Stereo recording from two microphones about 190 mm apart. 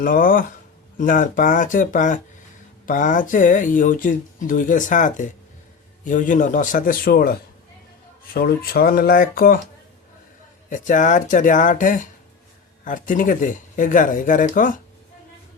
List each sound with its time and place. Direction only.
0.0 s speech: 45° left (ahead or behind)
10.7 s speech: 40° left (ahead or behind)